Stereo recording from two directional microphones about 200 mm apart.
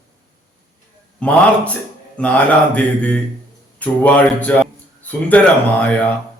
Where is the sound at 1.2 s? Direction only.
5° left (ahead or behind).